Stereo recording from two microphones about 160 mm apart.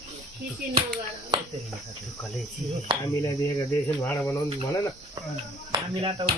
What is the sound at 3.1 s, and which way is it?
Cricket, 20° left (ahead or behind).